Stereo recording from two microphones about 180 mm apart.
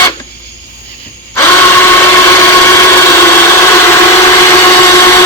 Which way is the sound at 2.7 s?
15° left (ahead or behind).